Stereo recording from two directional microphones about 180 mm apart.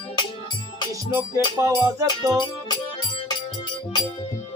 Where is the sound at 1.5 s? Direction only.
15° right (ahead or behind).